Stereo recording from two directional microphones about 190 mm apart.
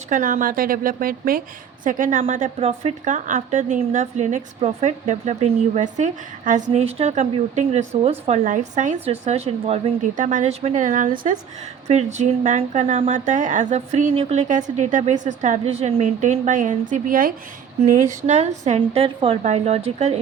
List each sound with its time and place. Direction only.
0.1 s a woman's voice: 45° right (ahead or behind)